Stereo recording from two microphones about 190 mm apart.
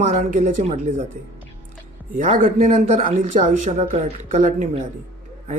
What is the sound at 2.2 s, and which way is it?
Speech, 45° right (ahead or behind).